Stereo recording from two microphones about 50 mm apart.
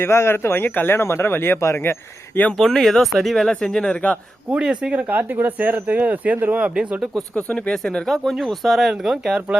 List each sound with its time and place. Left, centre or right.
0.0 s speech: left
1.0 s speech: left
1.6 s speech: left
2.6 s speech: centre
4.5 s speech: right
5.0 s speech: right
7.3 s speech: left
7.7 s speech: centre